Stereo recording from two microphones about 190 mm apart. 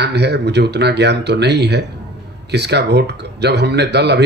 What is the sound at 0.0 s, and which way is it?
Speech, 60° right (ahead or behind).